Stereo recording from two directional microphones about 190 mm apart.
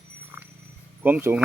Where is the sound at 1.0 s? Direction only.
10° right (ahead or behind).